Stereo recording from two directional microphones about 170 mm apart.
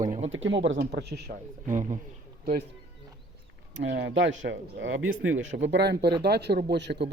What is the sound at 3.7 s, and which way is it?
Speech, 90° right.